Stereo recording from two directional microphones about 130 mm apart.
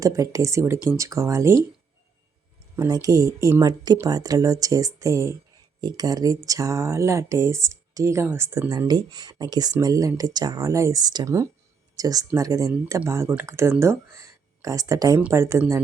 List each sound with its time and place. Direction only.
0.0 s speech: 25° right (ahead or behind)
2.7 s speech: 25° right (ahead or behind)
8.9 s speech: 35° right (ahead or behind)